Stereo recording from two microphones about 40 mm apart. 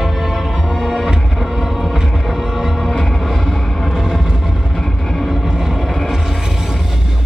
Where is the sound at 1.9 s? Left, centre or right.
Centre.